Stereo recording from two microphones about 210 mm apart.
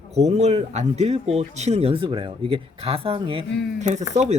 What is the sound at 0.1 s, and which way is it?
Speech, 30° right (ahead or behind).